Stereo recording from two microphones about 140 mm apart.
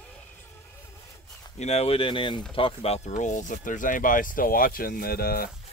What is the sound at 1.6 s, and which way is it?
Speech, 50° left (ahead or behind).